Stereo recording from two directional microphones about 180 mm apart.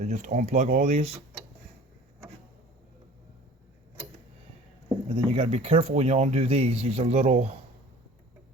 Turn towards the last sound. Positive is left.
turn(degrees=-35)  # may be behind; listen again after turning